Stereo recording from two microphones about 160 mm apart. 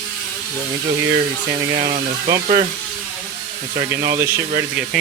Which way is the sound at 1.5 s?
35° right (ahead or behind).